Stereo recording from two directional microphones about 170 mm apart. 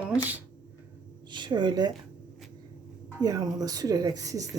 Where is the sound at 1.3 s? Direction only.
25° right (ahead or behind).